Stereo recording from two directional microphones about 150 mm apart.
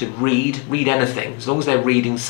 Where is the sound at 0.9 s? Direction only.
25° left (ahead or behind).